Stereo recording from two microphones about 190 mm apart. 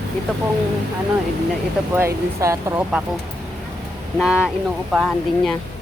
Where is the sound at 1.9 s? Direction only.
15° right (ahead or behind).